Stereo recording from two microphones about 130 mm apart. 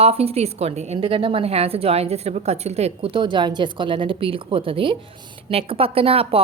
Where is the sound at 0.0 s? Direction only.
50° right (ahead or behind).